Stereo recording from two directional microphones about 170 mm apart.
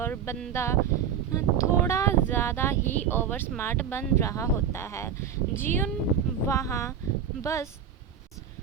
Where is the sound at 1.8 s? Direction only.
15° left (ahead or behind).